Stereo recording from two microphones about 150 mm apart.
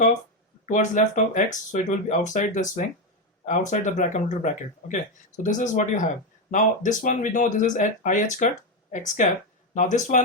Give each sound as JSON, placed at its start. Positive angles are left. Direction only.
{"t": 0.6, "sound": "speech", "side_deg": 55}